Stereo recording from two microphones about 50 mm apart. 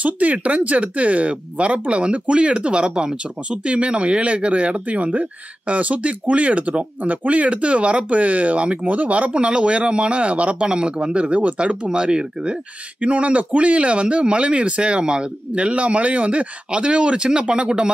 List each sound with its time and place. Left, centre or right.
0.0 s speech: right